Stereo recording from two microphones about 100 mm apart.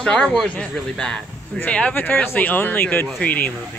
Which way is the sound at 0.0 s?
10° left (ahead or behind).